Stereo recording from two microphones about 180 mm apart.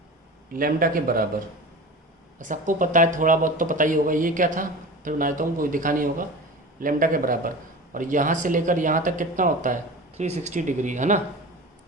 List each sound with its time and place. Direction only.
0.5 s speech: 50° right (ahead or behind)
2.4 s speech: 45° right (ahead or behind)